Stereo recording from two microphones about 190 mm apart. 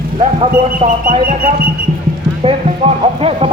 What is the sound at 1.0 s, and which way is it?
Speech, 50° right (ahead or behind).